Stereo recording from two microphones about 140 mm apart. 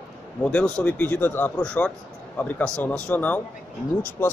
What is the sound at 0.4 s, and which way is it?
Speech, 10° left (ahead or behind).